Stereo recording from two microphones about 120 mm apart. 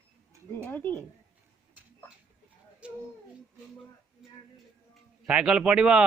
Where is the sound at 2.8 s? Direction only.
10° right (ahead or behind).